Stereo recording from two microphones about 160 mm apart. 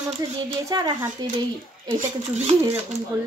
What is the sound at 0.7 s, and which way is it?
Speech, 25° right (ahead or behind).